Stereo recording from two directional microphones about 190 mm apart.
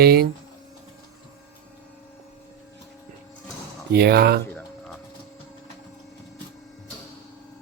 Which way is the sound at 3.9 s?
55° right (ahead or behind).